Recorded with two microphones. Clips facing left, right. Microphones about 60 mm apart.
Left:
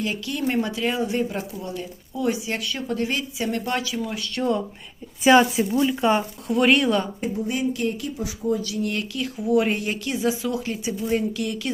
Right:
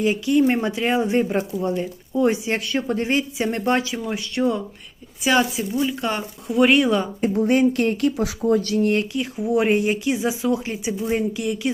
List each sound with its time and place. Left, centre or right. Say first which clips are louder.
0.0 s speech: right 8 dB; right
4.0 s speech: right 3 dB; right
5.7 s speech: left 3 dB; centre
6.5 s speech: right 2 dB; centre
7.2 s speech: right 8 dB; right
9.1 s speech: even; right